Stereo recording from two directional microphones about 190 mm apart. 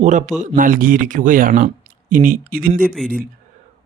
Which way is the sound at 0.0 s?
40° right (ahead or behind).